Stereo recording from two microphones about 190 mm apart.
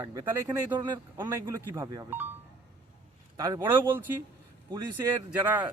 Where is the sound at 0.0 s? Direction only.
20° right (ahead or behind).